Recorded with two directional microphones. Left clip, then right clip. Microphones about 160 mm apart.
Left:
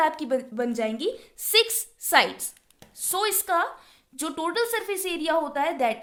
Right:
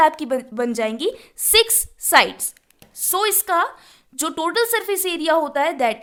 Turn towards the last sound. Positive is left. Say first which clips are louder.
# right 5 dB
turn(degrees=-65)  # may be behind; listen again after turning